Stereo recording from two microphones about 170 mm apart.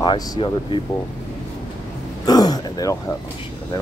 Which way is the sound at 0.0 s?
30° left (ahead or behind).